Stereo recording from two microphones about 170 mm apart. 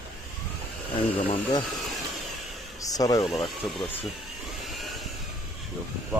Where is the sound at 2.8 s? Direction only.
20° left (ahead or behind).